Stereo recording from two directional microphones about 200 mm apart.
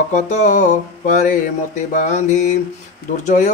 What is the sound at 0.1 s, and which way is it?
Mantra, 35° left (ahead or behind).